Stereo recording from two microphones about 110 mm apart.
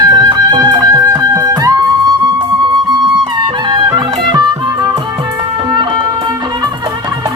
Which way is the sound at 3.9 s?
40° right (ahead or behind).